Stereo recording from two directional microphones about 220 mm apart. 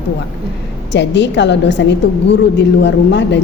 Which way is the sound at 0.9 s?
50° left (ahead or behind).